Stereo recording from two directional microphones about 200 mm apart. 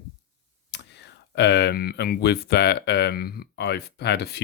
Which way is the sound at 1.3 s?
55° left (ahead or behind).